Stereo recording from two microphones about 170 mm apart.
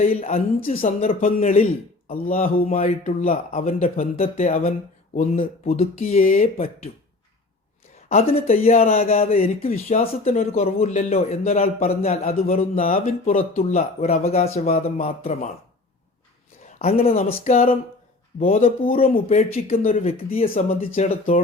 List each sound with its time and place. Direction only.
0.2 s speech: 35° left (ahead or behind)
2.8 s speech: 50° left (ahead or behind)
3.2 s speech: 35° left (ahead or behind)
8.1 s speech: 35° left (ahead or behind)
16.6 s speech: 40° left (ahead or behind)
18.3 s speech: 50° left (ahead or behind)